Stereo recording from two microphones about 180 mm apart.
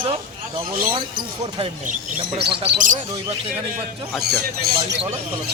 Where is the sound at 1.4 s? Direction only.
35° right (ahead or behind).